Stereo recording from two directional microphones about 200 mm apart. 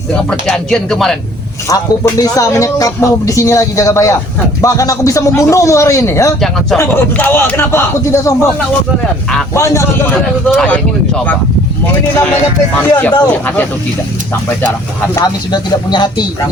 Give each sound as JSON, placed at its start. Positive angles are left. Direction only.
{"t": 0.1, "sound": "speech", "side_deg": 5}
{"t": 1.7, "sound": "speech", "side_deg": 15}
{"t": 9.6, "sound": "speech", "side_deg": 15}
{"t": 12.9, "sound": "speech", "side_deg": 10}
{"t": 15.1, "sound": "speech", "side_deg": 20}